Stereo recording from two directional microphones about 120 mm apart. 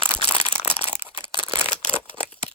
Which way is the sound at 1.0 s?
55° left (ahead or behind).